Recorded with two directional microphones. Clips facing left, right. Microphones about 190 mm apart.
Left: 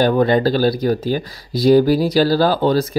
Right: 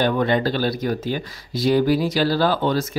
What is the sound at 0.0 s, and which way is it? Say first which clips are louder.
Speech: left 5 dB; 35° left (ahead or behind).